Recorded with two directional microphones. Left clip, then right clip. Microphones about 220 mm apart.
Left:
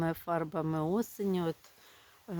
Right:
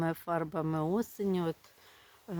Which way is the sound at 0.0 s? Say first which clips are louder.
Even; centre (ahead or behind).